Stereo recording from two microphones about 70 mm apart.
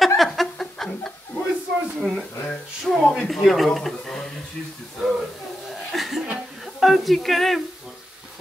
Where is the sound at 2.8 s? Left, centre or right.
Centre.